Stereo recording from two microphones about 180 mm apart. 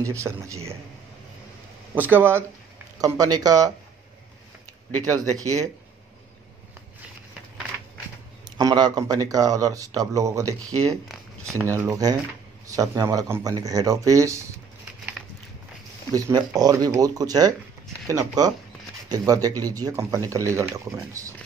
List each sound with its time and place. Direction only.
0.0 s speech: 15° right (ahead or behind)
2.0 s speech: 10° right (ahead or behind)
5.1 s speech: 20° right (ahead or behind)
8.5 s speech: 20° right (ahead or behind)
16.1 s speech: 20° right (ahead or behind)